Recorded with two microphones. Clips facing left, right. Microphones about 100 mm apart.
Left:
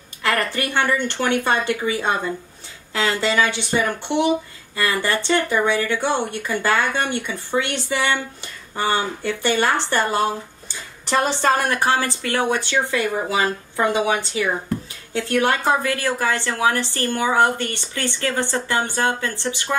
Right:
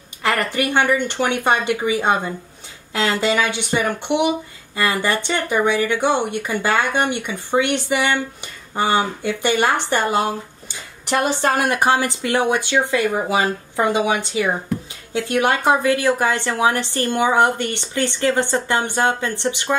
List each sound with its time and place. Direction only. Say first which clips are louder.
0.2 s a woman's voice: right 2 dB; 15° right (ahead or behind)